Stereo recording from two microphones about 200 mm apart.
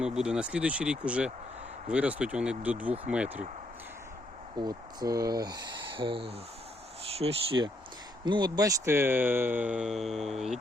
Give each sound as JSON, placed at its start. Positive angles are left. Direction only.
{"t": 0.0, "sound": "speech", "side_deg": -5}
{"t": 4.6, "sound": "speech", "side_deg": -20}